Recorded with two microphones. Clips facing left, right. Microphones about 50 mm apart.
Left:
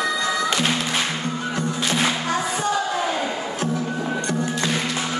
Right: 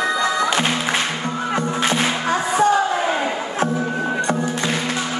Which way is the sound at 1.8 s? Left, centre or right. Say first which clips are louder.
Even; right.